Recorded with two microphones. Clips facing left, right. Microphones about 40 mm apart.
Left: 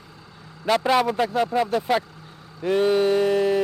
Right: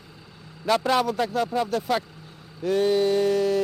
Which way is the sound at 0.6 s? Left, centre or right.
Centre.